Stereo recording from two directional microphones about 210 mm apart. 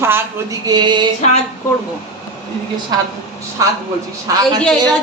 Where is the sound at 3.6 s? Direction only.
15° right (ahead or behind).